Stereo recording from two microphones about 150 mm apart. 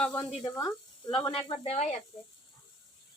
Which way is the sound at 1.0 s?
30° left (ahead or behind).